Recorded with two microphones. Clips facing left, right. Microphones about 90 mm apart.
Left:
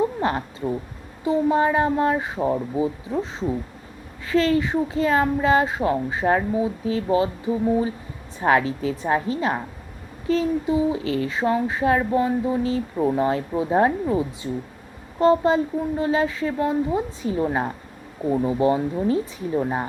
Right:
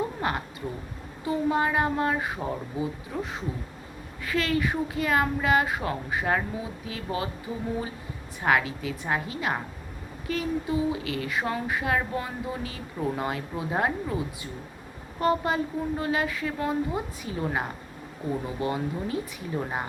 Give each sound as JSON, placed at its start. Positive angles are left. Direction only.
{"t": 0.2, "sound": "speech", "side_deg": 30}
{"t": 8.4, "sound": "speech", "side_deg": 35}